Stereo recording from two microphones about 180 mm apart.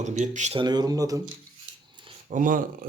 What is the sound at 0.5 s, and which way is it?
Speech, 25° right (ahead or behind).